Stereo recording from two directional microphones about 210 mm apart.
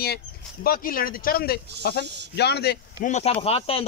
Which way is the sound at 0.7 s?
45° left (ahead or behind).